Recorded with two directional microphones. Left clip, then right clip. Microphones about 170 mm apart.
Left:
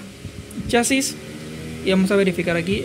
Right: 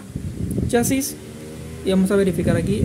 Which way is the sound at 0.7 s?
15° right (ahead or behind).